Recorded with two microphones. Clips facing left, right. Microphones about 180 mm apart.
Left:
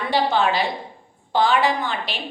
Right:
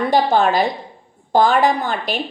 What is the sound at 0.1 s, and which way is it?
A woman's voice, 45° right (ahead or behind).